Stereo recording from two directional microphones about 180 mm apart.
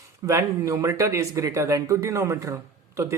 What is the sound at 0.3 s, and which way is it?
Speech, 15° right (ahead or behind).